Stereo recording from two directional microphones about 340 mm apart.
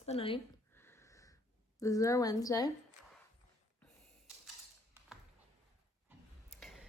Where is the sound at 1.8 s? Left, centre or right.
Centre.